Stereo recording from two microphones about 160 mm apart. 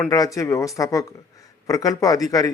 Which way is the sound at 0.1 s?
20° left (ahead or behind).